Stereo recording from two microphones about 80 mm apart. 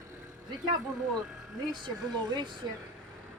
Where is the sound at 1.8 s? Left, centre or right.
Right.